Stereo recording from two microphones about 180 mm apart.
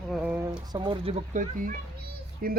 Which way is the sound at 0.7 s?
30° right (ahead or behind).